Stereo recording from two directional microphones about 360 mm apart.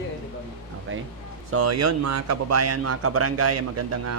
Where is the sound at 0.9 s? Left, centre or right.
Right.